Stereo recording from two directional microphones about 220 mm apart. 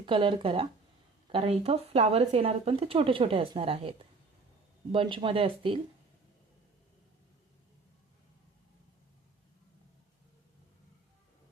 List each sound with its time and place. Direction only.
0.0 s speech: 25° right (ahead or behind)